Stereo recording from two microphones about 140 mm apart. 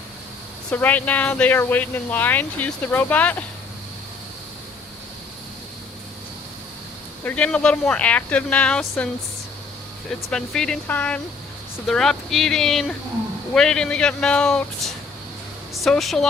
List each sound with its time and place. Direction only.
0.7 s speech: 10° left (ahead or behind)
7.3 s speech: 10° left (ahead or behind)
10.2 s speech: 5° left (ahead or behind)
15.7 s speech: centre (ahead or behind)